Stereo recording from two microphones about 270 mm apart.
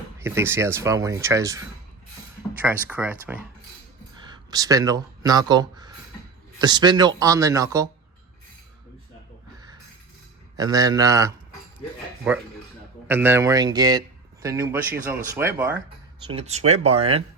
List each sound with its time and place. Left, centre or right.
0.2 s speech: centre
10.6 s speech: centre
16.2 s speech: right